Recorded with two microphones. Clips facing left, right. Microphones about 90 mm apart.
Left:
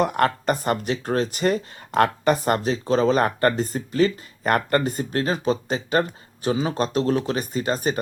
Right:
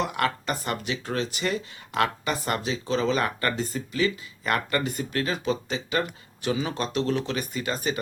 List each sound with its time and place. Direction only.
0.0 s speech: 45° left (ahead or behind)